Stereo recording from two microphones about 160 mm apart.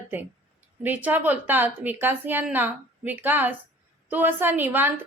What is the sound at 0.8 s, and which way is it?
A woman's voice, 10° right (ahead or behind).